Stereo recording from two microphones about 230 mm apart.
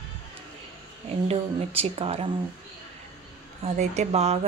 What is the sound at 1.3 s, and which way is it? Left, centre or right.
Speech, right.